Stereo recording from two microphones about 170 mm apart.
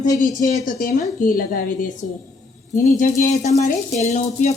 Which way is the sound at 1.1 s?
50° left (ahead or behind).